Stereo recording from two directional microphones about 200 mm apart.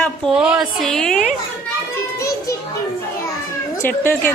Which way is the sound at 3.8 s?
10° left (ahead or behind).